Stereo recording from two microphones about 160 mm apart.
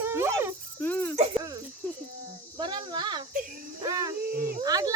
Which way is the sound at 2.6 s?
25° right (ahead or behind).